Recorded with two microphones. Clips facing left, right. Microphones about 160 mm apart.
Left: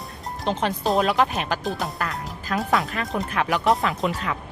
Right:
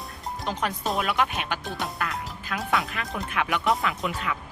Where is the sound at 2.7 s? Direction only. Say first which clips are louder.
Left 3 dB; 40° left (ahead or behind).